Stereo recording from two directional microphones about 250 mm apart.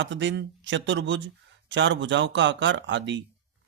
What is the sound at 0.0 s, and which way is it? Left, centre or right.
A man's voice, right.